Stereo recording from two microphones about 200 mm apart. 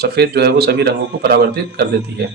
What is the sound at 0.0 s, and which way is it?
Speech, 55° right (ahead or behind).